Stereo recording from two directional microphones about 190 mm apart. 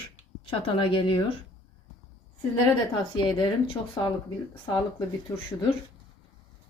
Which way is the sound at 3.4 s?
25° left (ahead or behind).